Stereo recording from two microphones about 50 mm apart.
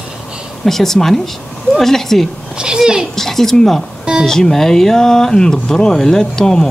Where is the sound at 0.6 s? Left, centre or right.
Centre.